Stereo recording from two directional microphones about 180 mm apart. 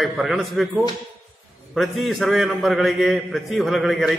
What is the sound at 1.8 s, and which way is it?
A man's voice, centre (ahead or behind).